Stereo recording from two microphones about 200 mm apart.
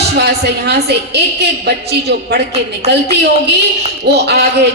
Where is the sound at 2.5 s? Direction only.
30° right (ahead or behind).